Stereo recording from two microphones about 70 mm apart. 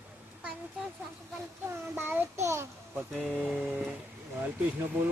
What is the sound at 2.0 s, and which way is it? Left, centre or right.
Child singing, right.